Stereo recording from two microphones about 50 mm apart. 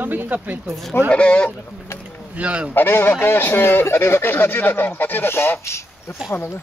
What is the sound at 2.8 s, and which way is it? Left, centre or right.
Speech, left.